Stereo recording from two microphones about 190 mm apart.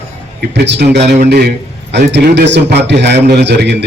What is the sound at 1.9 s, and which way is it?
A man's voice, 65° right (ahead or behind).